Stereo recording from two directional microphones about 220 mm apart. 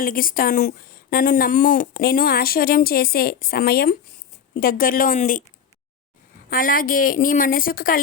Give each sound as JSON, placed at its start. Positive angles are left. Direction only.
{"t": 0.0, "sound": "speech", "side_deg": 40}
{"t": 6.5, "sound": "speech", "side_deg": 40}